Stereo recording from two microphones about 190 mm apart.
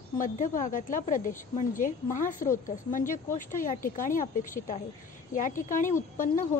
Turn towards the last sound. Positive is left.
turn(degrees=45)  # may be behind; listen again after turning